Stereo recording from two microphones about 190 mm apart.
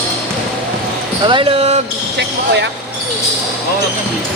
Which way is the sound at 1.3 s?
30° right (ahead or behind).